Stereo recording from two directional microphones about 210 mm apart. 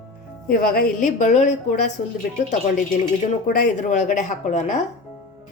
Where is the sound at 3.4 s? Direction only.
40° left (ahead or behind).